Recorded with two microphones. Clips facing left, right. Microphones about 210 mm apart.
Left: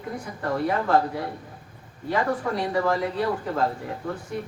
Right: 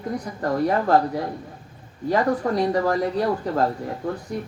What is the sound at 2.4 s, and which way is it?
A woman's voice, 40° right (ahead or behind).